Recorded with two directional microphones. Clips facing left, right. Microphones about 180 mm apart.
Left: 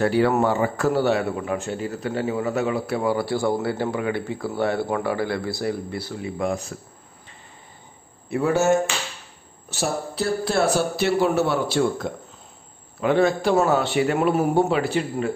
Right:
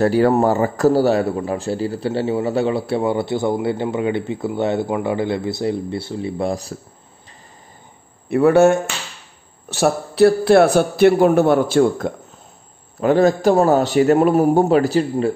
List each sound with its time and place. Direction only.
0.0 s a man's voice: 40° right (ahead or behind)
8.3 s a man's voice: 60° right (ahead or behind); by 15.3 s 35° right (ahead or behind)